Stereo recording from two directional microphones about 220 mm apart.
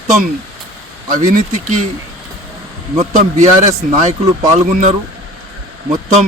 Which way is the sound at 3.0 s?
30° right (ahead or behind).